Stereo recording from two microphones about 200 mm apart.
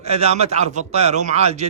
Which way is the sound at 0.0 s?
30° right (ahead or behind).